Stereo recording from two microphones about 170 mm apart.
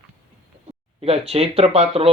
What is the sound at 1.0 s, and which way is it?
Speech, 35° right (ahead or behind).